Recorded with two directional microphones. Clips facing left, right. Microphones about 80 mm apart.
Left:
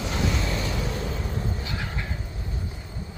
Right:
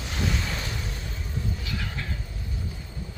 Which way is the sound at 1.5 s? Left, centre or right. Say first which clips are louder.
Left 2 dB; left.